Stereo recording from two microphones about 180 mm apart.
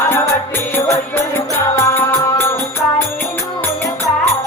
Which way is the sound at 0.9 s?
15° left (ahead or behind).